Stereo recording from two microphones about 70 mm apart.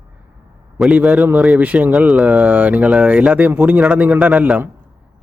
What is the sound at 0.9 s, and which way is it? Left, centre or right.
Speech, centre.